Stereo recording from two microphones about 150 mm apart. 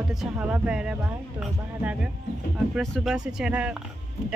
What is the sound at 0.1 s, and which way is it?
Speech, 5° right (ahead or behind).